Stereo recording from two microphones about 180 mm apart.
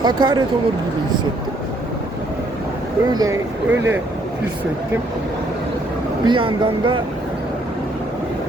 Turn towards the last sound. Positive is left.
turn(degrees=-25)  # may be behind; listen again after turning